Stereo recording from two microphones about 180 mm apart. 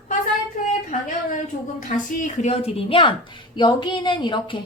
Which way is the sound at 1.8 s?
50° left (ahead or behind).